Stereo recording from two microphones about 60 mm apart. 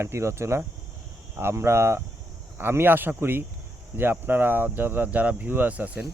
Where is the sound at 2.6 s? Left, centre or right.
Right.